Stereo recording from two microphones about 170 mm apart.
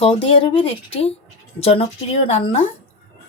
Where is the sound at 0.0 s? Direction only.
30° left (ahead or behind).